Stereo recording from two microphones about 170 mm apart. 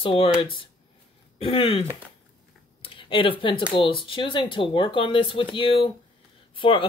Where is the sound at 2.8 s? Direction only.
30° left (ahead or behind).